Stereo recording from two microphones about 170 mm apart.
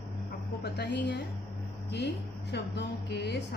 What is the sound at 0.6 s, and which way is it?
Speech, 75° left (ahead or behind).